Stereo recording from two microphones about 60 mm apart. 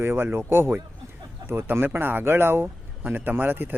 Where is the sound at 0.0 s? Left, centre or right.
Right.